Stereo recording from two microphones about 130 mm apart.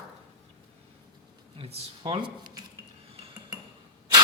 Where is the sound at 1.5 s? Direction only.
50° right (ahead or behind).